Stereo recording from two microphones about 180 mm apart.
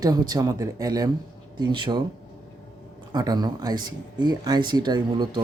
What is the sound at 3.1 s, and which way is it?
Speech, 20° right (ahead or behind).